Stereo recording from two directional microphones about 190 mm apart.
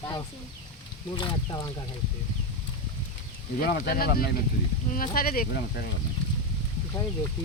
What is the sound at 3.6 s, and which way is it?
Speech, 50° left (ahead or behind).